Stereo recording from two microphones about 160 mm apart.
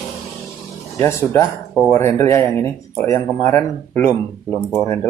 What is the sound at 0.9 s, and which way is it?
Speech, 15° left (ahead or behind).